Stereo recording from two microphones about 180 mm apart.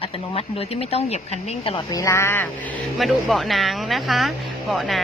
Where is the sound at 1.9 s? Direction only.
15° left (ahead or behind).